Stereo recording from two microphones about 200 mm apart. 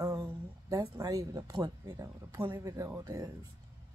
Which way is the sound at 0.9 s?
15° right (ahead or behind).